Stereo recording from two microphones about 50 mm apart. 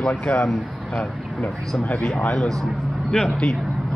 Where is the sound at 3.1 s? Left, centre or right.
Left.